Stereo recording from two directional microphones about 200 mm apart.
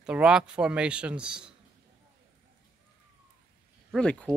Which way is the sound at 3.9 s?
5° left (ahead or behind).